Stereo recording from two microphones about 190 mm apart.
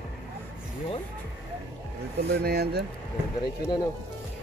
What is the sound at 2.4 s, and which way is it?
Speech, 55° right (ahead or behind).